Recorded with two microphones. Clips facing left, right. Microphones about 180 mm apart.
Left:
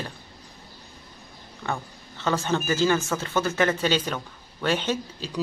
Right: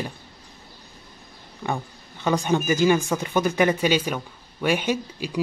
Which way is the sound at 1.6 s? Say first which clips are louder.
Right 3 dB; 15° right (ahead or behind).